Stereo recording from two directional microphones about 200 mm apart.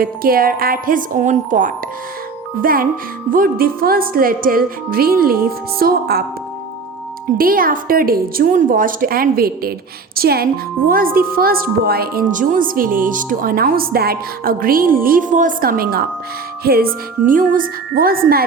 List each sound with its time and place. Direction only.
0.0 s speech: 45° right (ahead or behind)
7.3 s speech: 45° right (ahead or behind)